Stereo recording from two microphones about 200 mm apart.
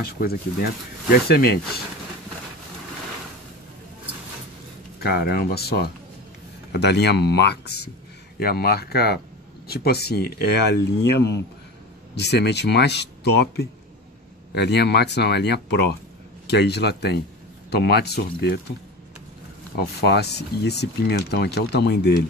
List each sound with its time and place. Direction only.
0.2 s speech: 50° left (ahead or behind)
5.0 s speech: 50° left (ahead or behind)
14.5 s speech: 55° left (ahead or behind)
20.0 s speech: 55° left (ahead or behind)